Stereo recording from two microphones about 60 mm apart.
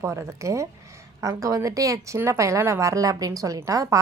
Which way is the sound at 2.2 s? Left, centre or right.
Right.